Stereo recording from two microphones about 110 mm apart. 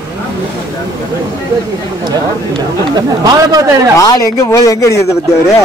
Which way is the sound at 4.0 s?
30° left (ahead or behind).